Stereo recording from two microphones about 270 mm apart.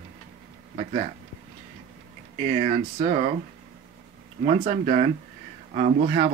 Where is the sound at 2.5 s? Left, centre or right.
Right.